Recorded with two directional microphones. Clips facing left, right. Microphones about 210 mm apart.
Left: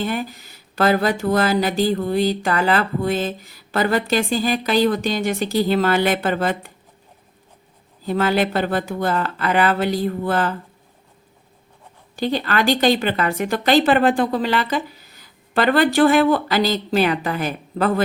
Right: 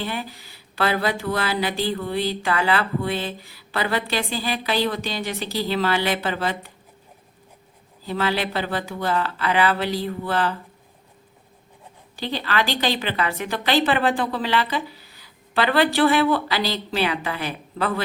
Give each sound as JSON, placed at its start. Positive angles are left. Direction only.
{"t": 0.0, "sound": "speech", "side_deg": 45}
{"t": 8.0, "sound": "speech", "side_deg": 50}
{"t": 12.1, "sound": "speech", "side_deg": 45}